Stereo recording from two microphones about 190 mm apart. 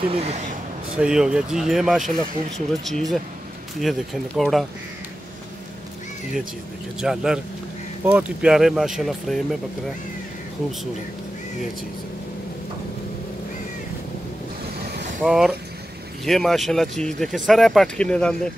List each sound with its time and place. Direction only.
0.1 s speech: 35° right (ahead or behind)
0.9 s speech: 5° right (ahead or behind)
7.0 s speech: 5° right (ahead or behind)
10.6 s speech: centre (ahead or behind)
15.2 s speech: centre (ahead or behind)